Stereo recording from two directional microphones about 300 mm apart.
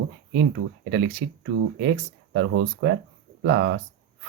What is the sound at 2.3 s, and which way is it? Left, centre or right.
Speech, right.